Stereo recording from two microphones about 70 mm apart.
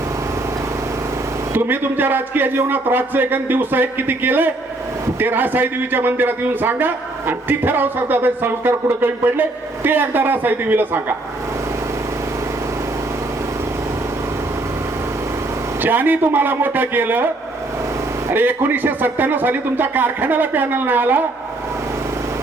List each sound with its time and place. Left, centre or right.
1.5 s a man's voice: right
15.8 s a man's voice: right
18.3 s a man's voice: right